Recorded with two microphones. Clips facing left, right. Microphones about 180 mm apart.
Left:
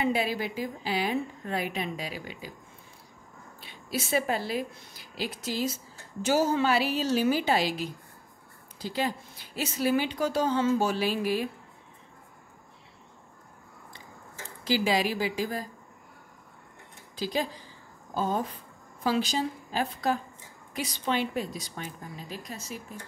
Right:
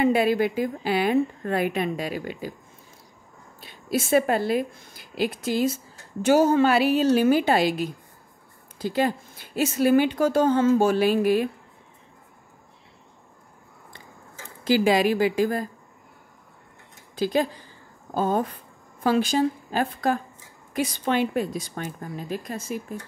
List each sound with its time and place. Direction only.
0.0 s a woman's voice: 55° right (ahead or behind)
3.6 s a woman's voice: 50° right (ahead or behind)
14.6 s a woman's voice: 55° right (ahead or behind)
17.1 s a woman's voice: 55° right (ahead or behind)